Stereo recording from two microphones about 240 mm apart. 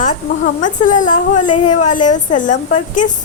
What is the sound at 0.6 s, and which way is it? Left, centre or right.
A woman's voice, left.